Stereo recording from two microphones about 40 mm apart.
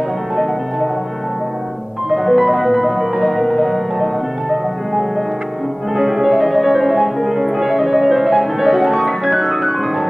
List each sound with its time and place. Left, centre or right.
2.0 s music: centre